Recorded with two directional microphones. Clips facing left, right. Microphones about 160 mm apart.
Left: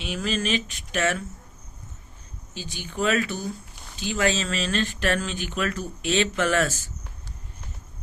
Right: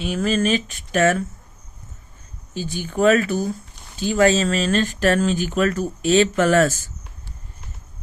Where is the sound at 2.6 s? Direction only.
45° right (ahead or behind).